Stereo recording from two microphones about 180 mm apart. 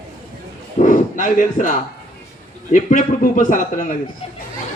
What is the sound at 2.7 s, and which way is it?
A man's voice, 45° left (ahead or behind).